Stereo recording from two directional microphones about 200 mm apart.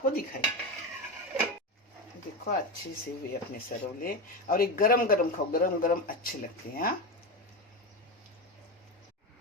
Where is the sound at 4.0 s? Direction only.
45° left (ahead or behind).